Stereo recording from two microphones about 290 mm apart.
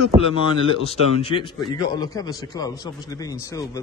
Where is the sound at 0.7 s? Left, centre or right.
Centre.